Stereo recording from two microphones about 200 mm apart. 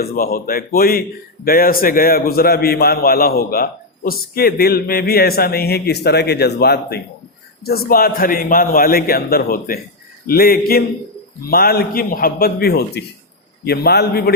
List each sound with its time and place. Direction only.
0.0 s a man's voice: 50° left (ahead or behind)